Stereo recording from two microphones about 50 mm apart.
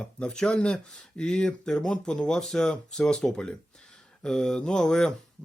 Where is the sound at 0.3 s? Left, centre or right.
Centre.